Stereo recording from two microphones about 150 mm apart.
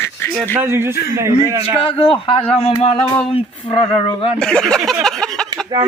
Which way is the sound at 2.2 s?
40° left (ahead or behind).